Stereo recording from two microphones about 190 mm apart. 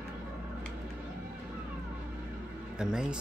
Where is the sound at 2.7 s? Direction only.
5° right (ahead or behind).